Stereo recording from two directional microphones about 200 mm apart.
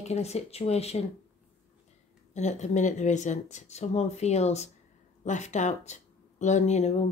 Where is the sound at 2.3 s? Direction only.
35° left (ahead or behind).